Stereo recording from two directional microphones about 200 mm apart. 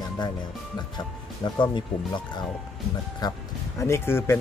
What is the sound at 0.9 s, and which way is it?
Speech, 20° left (ahead or behind).